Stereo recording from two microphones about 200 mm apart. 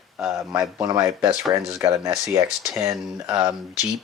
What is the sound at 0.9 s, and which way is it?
Speech, 15° right (ahead or behind).